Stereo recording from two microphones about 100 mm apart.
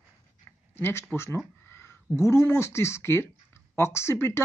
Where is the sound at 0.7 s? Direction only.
25° left (ahead or behind).